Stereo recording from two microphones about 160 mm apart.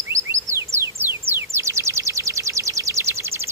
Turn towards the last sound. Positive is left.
turn(degrees=-15)  # may be behind; listen again after turning